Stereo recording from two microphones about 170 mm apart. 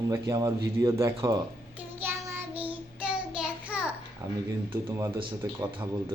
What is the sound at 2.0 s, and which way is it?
Child singing, 15° right (ahead or behind).